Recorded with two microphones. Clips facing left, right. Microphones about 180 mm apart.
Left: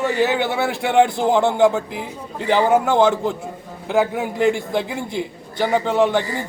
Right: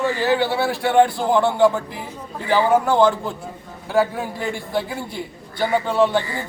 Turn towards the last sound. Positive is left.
turn(degrees=20)  # may be behind; listen again after turning